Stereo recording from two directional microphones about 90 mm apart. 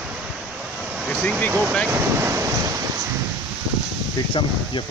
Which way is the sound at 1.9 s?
30° right (ahead or behind).